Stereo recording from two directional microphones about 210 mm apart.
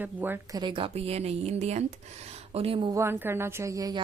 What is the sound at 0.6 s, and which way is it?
A woman's voice, 25° right (ahead or behind).